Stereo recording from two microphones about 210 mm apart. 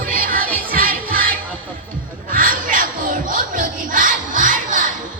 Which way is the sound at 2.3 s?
40° right (ahead or behind).